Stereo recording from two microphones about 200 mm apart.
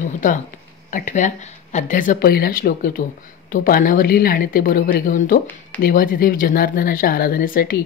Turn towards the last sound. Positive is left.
turn(degrees=45)  # may be behind; listen again after turning